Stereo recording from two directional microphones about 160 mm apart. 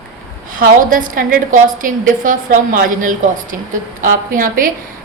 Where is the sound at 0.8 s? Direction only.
55° right (ahead or behind).